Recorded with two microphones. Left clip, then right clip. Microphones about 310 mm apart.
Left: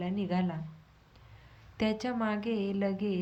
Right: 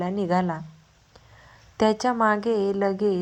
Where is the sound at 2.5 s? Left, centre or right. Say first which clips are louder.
Right 10 dB; right.